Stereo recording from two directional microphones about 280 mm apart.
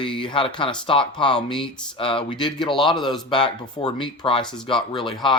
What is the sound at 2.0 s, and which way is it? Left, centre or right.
Speech, centre.